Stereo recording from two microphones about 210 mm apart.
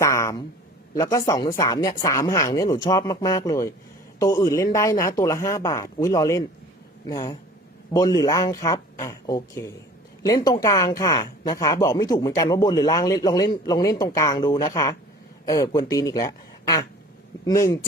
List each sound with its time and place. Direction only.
0.0 s speech: 15° left (ahead or behind)